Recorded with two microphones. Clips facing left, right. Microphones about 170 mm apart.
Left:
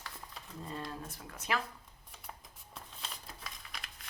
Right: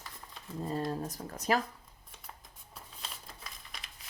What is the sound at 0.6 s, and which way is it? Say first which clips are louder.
Speech: right 8 dB; 40° right (ahead or behind).